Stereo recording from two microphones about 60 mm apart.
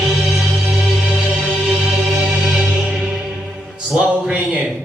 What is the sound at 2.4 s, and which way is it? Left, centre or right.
Music, centre.